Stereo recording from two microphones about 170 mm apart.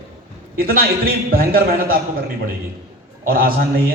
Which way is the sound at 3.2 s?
60° right (ahead or behind).